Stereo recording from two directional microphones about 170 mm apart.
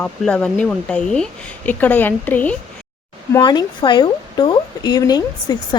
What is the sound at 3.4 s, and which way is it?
Speech, 25° left (ahead or behind).